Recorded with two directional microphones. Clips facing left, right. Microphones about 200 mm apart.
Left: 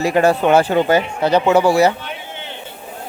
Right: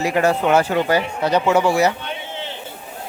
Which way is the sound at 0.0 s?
30° left (ahead or behind).